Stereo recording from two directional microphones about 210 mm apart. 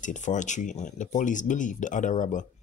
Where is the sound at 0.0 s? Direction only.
35° left (ahead or behind).